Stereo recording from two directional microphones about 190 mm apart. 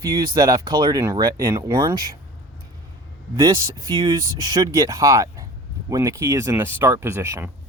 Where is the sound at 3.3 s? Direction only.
20° right (ahead or behind).